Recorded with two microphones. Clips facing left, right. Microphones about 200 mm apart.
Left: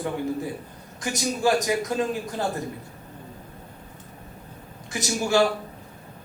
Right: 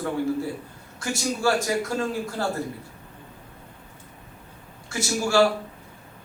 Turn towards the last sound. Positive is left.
turn(degrees=20)  # may be behind; listen again after turning